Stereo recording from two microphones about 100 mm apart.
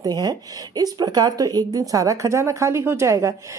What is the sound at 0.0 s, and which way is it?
Speech, 40° right (ahead or behind).